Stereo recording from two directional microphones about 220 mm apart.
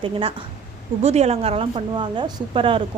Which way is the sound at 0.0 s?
25° right (ahead or behind).